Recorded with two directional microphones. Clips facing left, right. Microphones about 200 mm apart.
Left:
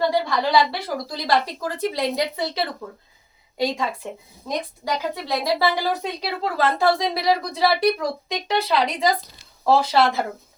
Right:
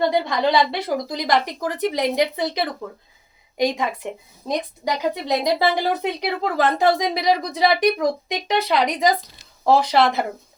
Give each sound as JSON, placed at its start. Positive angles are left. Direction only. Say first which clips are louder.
{"t": 0.1, "sound": "a woman's voice", "louder": "right 1 dB", "side_deg": -20}